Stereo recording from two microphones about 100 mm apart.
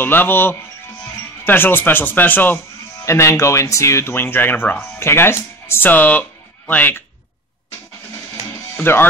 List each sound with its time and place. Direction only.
0.0 s speech: 20° left (ahead or behind)
3.1 s speech: 30° left (ahead or behind)
8.7 s music: 25° left (ahead or behind)